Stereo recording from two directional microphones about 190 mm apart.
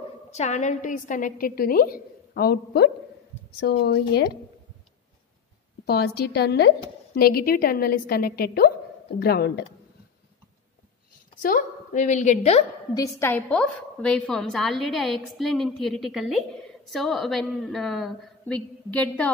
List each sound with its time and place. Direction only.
0.3 s a woman's voice: 35° left (ahead or behind); by 4.3 s 60° left (ahead or behind)
5.9 s a woman's voice: 55° left (ahead or behind)
11.4 s a woman's voice: 45° left (ahead or behind)
12.9 s a woman's voice: 15° left (ahead or behind)